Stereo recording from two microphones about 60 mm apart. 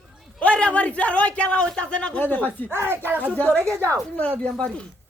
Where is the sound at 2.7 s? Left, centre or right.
Right.